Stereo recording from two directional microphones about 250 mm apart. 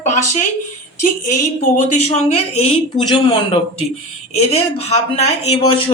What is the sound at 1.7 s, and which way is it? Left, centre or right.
Speech, left.